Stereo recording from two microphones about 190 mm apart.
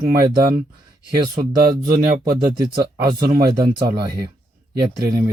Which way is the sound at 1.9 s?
50° right (ahead or behind).